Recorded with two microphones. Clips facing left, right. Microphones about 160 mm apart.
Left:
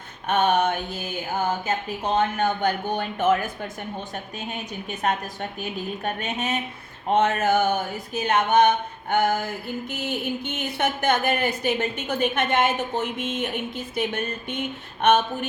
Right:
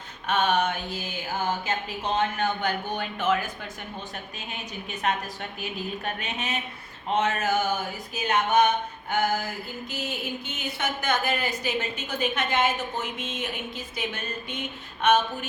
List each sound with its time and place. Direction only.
0.3 s speech: 50° left (ahead or behind)
2.1 s speech: 45° left (ahead or behind)
4.9 s speech: 45° left (ahead or behind)